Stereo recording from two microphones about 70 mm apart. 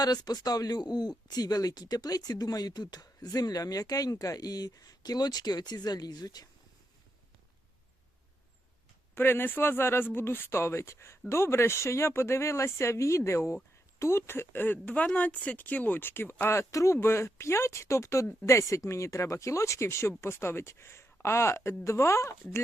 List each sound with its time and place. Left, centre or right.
0.0 s speech: left
9.1 s speech: left